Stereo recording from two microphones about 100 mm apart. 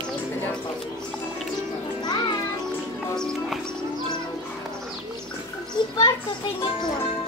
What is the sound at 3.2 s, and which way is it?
Music, 5° left (ahead or behind).